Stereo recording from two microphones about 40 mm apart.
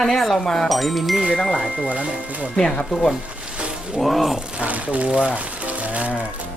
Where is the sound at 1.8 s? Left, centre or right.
Right.